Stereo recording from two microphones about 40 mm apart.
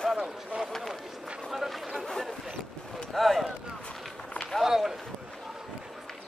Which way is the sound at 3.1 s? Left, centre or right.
Centre.